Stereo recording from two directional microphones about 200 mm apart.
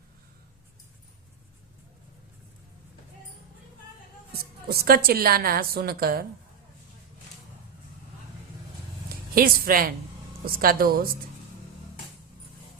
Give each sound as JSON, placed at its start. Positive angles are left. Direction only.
{"t": 4.3, "sound": "a woman's voice", "side_deg": -50}
{"t": 9.3, "sound": "a woman's voice", "side_deg": -45}